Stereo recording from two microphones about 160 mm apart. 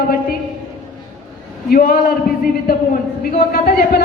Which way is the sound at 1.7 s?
70° left (ahead or behind).